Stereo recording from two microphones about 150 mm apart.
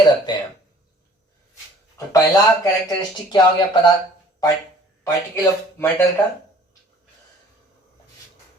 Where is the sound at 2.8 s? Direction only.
30° left (ahead or behind).